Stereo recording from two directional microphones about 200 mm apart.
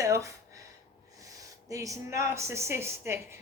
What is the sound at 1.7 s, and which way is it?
A woman's voice, 15° right (ahead or behind).